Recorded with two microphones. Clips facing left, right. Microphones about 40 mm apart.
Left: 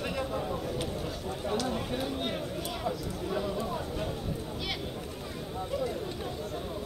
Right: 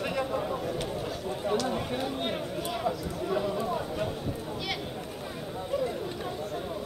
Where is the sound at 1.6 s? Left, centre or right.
Centre.